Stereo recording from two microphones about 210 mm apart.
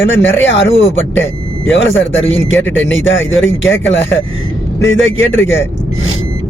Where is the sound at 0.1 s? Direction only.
65° left (ahead or behind).